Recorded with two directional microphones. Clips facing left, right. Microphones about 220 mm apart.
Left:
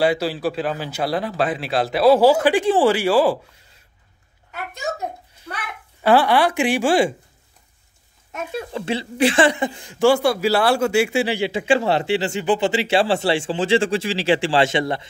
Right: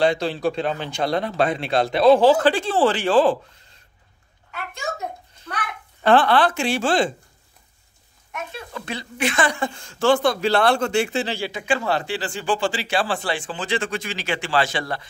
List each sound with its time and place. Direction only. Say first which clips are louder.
0.0 s speech: left 1 dB; 5° left (ahead or behind)
6.0 s speech: left 1 dB; 10° left (ahead or behind)
8.7 s speech: left 7 dB; 25° left (ahead or behind); by 11.4 s 10° left (ahead or behind)
11.4 s speech: left 5 dB; 25° left (ahead or behind)